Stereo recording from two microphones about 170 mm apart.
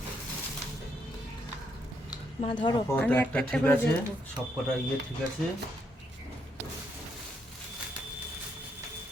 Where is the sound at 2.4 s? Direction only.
45° left (ahead or behind).